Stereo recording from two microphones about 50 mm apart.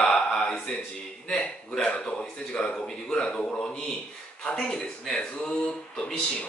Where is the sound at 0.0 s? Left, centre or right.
Centre.